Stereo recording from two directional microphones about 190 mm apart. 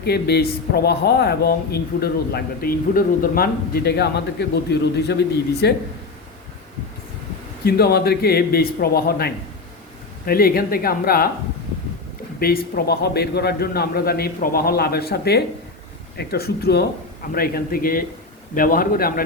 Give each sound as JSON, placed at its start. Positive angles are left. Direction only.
{"t": 0.0, "sound": "speech", "side_deg": 55}
{"t": 7.6, "sound": "a woman's voice", "side_deg": 55}
{"t": 12.4, "sound": "a woman's voice", "side_deg": 55}